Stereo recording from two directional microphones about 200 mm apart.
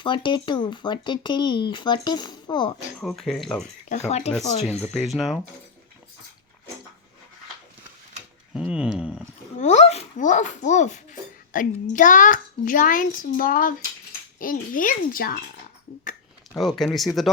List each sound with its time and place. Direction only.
0.0 s speech: 25° left (ahead or behind)
3.0 s speech: centre (ahead or behind)
3.8 s a child's voice: 35° left (ahead or behind)
4.3 s speech: centre (ahead or behind)
8.5 s speech: 5° right (ahead or behind)
9.6 s a child's voice: 35° left (ahead or behind)
16.6 s speech: centre (ahead or behind)